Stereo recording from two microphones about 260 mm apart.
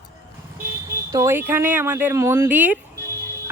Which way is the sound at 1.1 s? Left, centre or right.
Centre.